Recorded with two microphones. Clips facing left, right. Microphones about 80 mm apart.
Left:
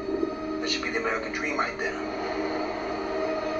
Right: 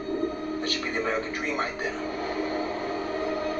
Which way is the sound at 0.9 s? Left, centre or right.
Centre.